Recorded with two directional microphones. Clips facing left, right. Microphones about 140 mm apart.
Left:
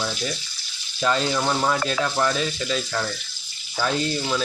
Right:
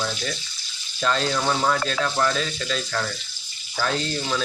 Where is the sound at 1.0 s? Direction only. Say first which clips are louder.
Left 1 dB; 10° left (ahead or behind).